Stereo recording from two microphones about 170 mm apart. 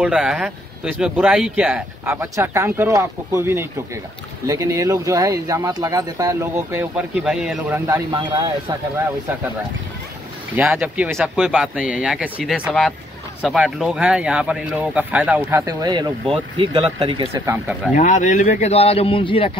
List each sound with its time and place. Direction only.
0.0 s speech: 5° right (ahead or behind)
7.8 s speech: 25° right (ahead or behind)
10.5 s speech: 10° right (ahead or behind)
15.6 s speech: 25° right (ahead or behind)
17.9 s a man's voice: 45° left (ahead or behind)